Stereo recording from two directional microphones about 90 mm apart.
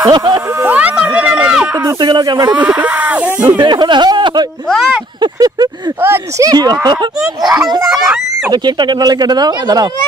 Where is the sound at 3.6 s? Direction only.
55° right (ahead or behind).